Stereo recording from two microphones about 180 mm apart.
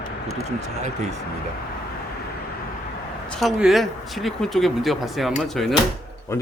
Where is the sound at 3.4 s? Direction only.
Centre (ahead or behind).